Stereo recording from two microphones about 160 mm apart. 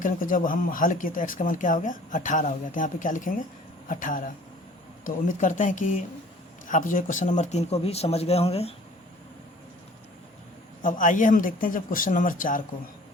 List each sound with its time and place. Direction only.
0.0 s speech: 55° left (ahead or behind); by 8.7 s 40° left (ahead or behind)
10.8 s speech: 55° left (ahead or behind)